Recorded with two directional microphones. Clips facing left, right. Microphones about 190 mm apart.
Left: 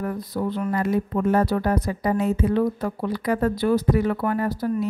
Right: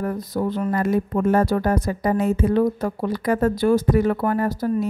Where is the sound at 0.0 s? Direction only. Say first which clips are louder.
Right 2 dB; 45° right (ahead or behind).